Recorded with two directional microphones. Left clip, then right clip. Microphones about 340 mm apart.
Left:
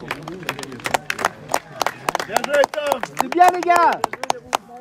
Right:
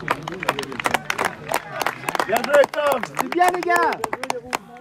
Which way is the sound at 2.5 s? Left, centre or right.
Centre.